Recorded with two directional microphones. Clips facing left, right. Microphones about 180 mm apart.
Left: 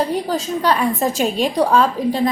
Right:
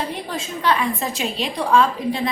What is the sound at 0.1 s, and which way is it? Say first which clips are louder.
A woman's voice: left 8 dB; 40° left (ahead or behind).